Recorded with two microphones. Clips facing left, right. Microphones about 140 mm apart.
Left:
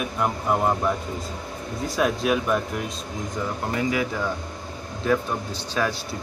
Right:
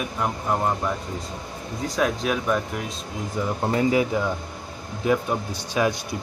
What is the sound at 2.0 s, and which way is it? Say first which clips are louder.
Speech: left 2 dB; centre (ahead or behind).